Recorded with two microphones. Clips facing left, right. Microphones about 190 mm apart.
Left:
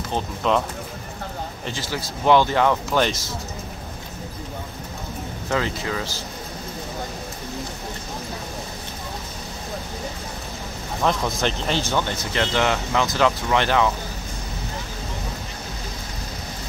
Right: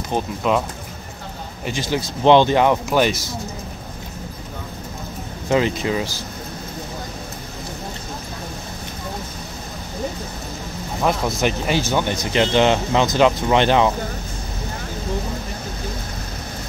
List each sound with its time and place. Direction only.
0.1 s speech: 5° right (ahead or behind)
1.7 s speech: 20° right (ahead or behind)
5.5 s speech: 20° right (ahead or behind)
11.0 s speech: 10° right (ahead or behind)